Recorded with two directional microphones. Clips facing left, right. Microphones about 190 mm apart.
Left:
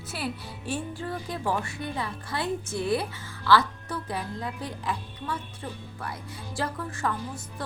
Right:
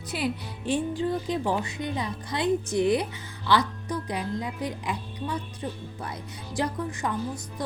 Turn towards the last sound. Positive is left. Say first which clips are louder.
# right 4 dB
turn(degrees=-15)  # may be behind; listen again after turning